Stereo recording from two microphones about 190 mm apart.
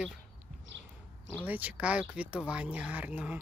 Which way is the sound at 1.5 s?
10° right (ahead or behind).